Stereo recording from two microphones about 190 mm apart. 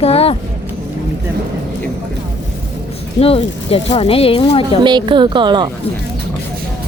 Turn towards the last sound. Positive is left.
turn(degrees=-25)  # may be behind; listen again after turning